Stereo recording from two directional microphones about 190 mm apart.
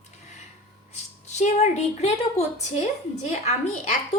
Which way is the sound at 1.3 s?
35° left (ahead or behind).